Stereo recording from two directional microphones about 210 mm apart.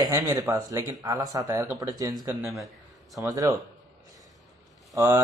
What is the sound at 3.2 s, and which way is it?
Speech, 15° right (ahead or behind).